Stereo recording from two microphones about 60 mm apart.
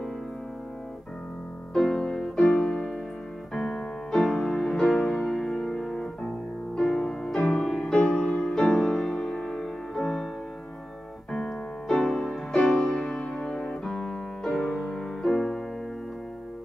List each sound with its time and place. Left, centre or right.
1.7 s music: centre
7.8 s music: left
11.3 s music: centre